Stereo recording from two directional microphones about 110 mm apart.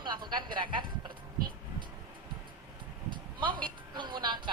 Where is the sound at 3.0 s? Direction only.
45° right (ahead or behind).